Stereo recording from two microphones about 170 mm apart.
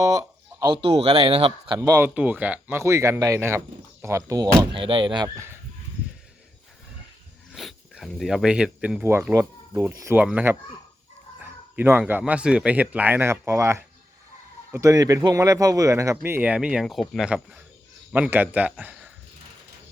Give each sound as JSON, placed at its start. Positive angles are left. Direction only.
{"t": 0.0, "sound": "speech", "side_deg": -20}
{"t": 7.5, "sound": "a man's voice", "side_deg": 0}